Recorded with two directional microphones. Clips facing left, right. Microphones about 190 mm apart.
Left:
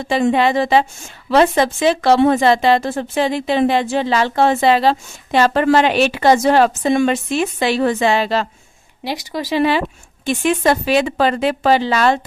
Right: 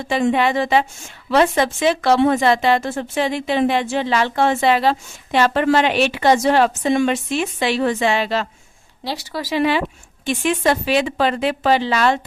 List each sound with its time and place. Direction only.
0.1 s speech: 35° left (ahead or behind)
9.0 s speech: 15° left (ahead or behind); by 12.2 s 40° left (ahead or behind)